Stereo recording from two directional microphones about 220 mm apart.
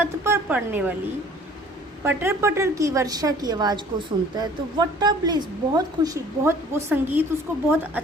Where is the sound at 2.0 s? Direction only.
10° right (ahead or behind).